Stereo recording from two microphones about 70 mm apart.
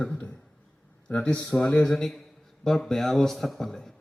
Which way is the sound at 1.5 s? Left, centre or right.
Centre.